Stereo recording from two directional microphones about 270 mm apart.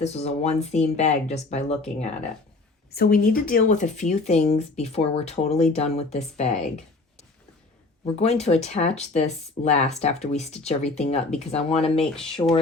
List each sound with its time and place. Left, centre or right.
0.0 s speech: left
2.9 s speech: left
8.0 s speech: left
11.9 s speech: centre